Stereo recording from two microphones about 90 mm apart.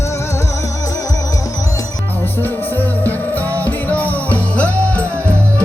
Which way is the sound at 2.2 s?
20° left (ahead or behind).